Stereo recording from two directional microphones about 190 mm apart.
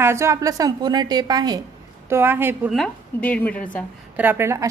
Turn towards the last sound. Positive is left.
turn(degrees=-15)  # may be behind; listen again after turning